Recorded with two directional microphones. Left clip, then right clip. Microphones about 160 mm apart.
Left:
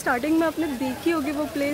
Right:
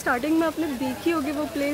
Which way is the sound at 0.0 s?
5° left (ahead or behind).